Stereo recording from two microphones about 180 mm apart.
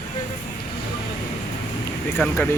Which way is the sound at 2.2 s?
10° left (ahead or behind).